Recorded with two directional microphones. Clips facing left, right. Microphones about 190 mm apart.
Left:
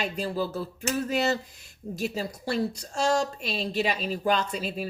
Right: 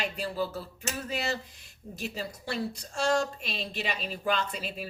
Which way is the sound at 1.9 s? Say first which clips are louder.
Left 5 dB; 40° left (ahead or behind).